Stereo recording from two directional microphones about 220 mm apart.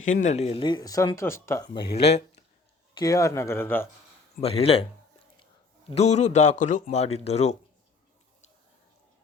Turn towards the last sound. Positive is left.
turn(degrees=30)  # may be behind; listen again after turning